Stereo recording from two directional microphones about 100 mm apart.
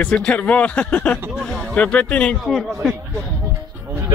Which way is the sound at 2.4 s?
5° right (ahead or behind).